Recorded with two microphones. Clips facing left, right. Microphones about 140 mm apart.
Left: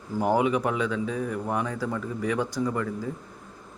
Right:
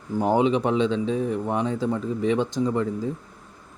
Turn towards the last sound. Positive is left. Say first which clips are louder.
# right 4 dB
turn(degrees=-20)  # may be behind; listen again after turning